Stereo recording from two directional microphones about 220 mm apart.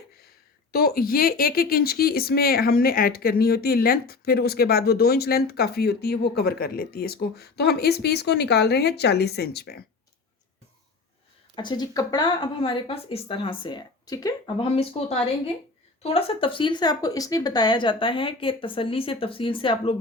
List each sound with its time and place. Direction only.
0.7 s speech: 45° left (ahead or behind)
11.5 s speech: 20° left (ahead or behind)